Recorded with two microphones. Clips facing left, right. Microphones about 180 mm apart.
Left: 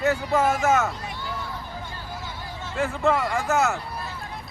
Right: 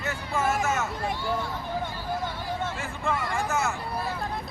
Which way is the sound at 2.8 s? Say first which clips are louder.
Left 7 dB; 75° left (ahead or behind).